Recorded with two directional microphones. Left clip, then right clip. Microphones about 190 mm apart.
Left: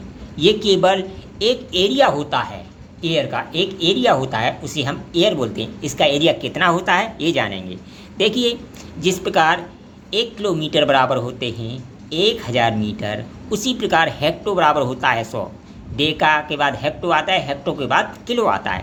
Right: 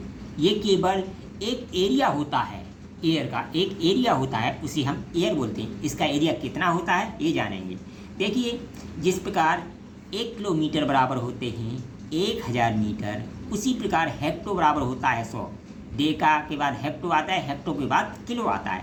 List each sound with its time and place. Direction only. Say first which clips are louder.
0.4 s speech: left 8 dB; 35° left (ahead or behind)